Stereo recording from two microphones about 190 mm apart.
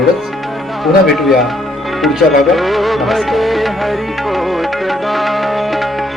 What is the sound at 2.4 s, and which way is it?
Music, centre (ahead or behind).